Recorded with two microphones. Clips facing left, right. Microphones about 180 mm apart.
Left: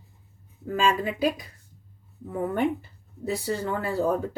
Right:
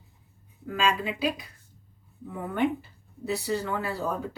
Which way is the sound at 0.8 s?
50° left (ahead or behind).